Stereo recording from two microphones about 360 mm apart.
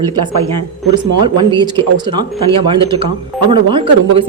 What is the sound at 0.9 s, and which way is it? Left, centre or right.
Speech, centre.